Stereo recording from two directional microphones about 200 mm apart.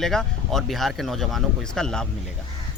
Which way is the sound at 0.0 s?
Centre (ahead or behind).